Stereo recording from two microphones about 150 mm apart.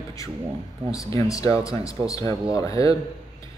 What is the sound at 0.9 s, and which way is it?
Speech, 25° left (ahead or behind).